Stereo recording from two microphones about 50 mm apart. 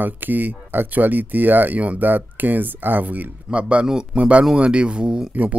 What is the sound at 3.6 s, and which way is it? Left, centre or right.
Speech, right.